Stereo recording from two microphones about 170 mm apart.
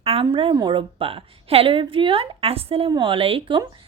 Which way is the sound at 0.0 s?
35° right (ahead or behind).